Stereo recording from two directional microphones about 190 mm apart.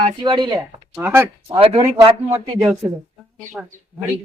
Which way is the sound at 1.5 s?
30° right (ahead or behind).